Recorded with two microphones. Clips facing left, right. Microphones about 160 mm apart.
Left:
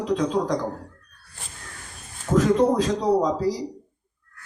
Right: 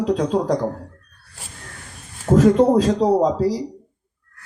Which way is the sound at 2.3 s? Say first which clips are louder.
Right 5 dB; 50° right (ahead or behind).